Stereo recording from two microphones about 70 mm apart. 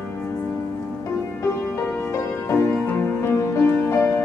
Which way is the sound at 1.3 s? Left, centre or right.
Left.